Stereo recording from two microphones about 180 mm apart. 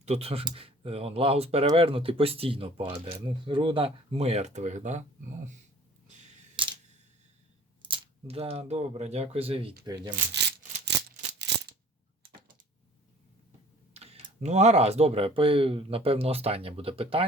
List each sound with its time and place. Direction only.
0.0 s speech: 35° right (ahead or behind)
6.6 s camera: 25° right (ahead or behind)
7.9 s speech: 30° right (ahead or behind)
13.9 s speech: 35° right (ahead or behind)